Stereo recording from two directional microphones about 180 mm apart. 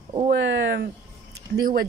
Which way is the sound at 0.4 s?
70° right (ahead or behind).